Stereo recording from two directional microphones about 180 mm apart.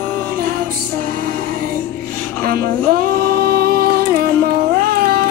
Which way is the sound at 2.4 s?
55° right (ahead or behind).